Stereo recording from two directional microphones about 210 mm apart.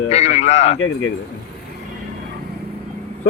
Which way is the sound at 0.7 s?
60° left (ahead or behind).